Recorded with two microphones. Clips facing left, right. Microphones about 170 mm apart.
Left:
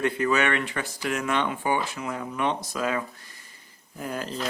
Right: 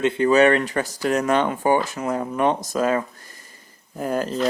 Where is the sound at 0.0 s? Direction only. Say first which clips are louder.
Right 8 dB; 25° right (ahead or behind).